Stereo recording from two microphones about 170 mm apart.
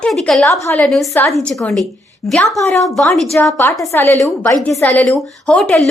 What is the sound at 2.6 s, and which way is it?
Speech, 15° left (ahead or behind).